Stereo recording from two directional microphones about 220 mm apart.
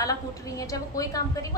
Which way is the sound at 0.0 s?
15° left (ahead or behind).